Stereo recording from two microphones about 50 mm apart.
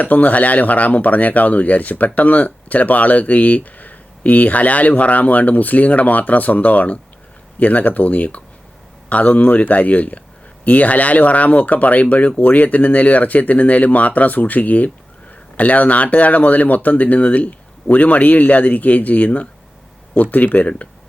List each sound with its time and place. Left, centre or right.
0.0 s speech: left